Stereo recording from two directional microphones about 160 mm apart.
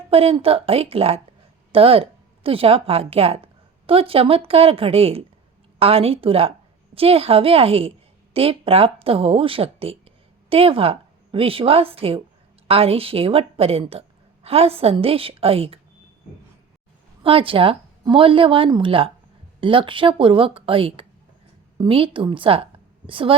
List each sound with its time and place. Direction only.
0.1 s a woman's voice: 35° right (ahead or behind)
17.2 s a woman's voice: 35° right (ahead or behind)